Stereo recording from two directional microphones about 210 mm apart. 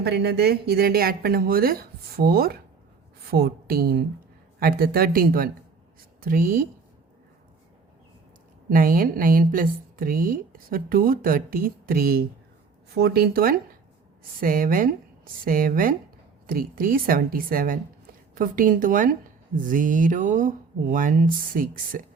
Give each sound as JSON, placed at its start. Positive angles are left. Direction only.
{"t": 0.0, "sound": "speech", "side_deg": -50}
{"t": 8.7, "sound": "speech", "side_deg": -40}